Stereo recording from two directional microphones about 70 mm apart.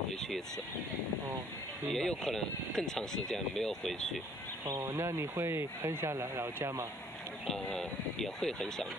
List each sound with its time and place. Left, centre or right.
0.1 s vehicle: centre
1.9 s speech: centre
5.3 s speech: right
6.1 s speech: right
6.6 s speech: right
7.4 s speech: centre